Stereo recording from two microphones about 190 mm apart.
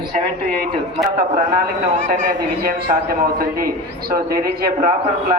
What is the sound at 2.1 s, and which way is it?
A man's voice, 45° right (ahead or behind).